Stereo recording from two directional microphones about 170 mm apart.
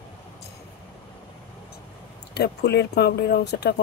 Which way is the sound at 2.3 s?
75° left (ahead or behind).